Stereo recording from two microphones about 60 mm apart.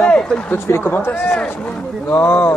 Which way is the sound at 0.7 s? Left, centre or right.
Left.